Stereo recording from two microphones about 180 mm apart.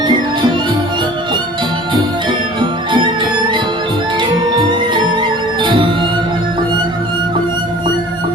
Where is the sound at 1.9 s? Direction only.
25° right (ahead or behind).